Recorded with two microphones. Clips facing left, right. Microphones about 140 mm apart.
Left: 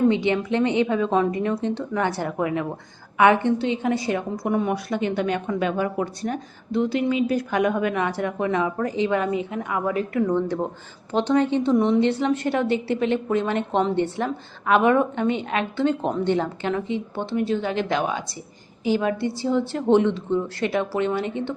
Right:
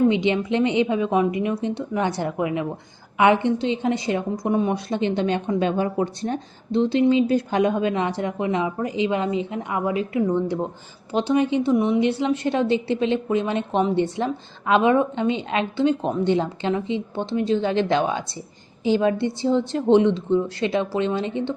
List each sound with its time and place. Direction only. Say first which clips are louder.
0.1 s a woman's voice: right 1 dB; 20° right (ahead or behind)